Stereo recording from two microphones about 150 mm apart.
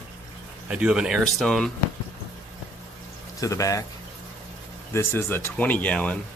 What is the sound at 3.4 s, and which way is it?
Speech, 20° left (ahead or behind).